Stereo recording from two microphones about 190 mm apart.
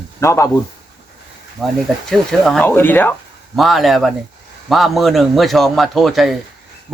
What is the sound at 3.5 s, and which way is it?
A man's voice, centre (ahead or behind).